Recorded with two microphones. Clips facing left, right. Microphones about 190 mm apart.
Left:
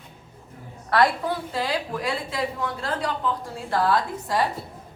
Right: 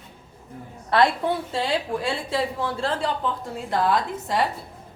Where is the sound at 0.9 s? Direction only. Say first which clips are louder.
Right 1 dB; 25° right (ahead or behind).